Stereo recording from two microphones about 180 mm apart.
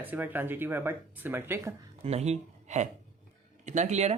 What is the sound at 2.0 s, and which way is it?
Speech, 35° right (ahead or behind).